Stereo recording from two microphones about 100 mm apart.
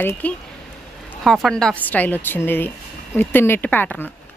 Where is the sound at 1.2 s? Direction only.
Centre (ahead or behind).